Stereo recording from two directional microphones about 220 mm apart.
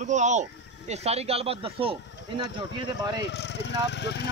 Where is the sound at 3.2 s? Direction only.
50° left (ahead or behind).